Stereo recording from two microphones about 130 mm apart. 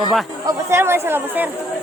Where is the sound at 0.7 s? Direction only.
20° right (ahead or behind).